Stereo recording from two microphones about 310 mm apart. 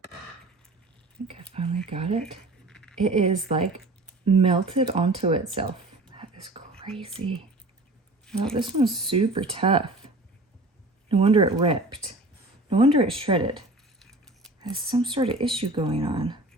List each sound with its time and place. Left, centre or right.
1.5 s a woman's voice: centre
2.6 s a sound: centre
3.0 s a woman's voice: centre
6.4 s whispering: centre
7.0 s a woman's voice: centre
8.5 s speech: centre
11.1 s speech: centre
14.0 s a sound: centre
14.6 s speech: centre